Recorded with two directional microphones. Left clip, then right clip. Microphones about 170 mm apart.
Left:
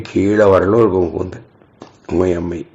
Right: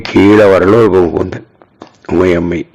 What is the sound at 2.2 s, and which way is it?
Speech, 25° right (ahead or behind).